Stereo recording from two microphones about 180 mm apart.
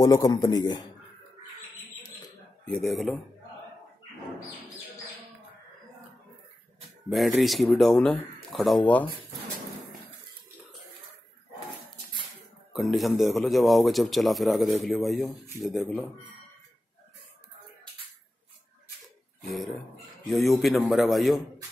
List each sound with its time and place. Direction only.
0.0 s a man's voice: 20° left (ahead or behind)
2.6 s a man's voice: 5° left (ahead or behind)
7.1 s a man's voice: centre (ahead or behind)
12.7 s a man's voice: centre (ahead or behind)
20.2 s a man's voice: centre (ahead or behind)